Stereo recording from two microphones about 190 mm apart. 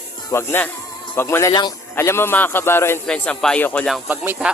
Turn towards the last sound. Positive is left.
turn(degrees=-10)  # may be behind; listen again after turning